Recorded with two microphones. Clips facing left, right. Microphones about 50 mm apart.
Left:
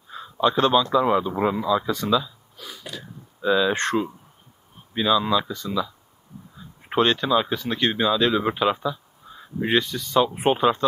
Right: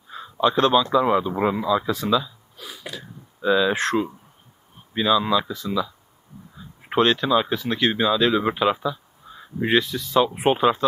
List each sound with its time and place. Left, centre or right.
0.1 s a man's voice: centre